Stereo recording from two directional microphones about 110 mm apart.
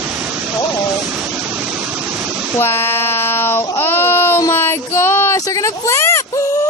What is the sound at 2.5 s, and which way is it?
Child singing, 20° left (ahead or behind).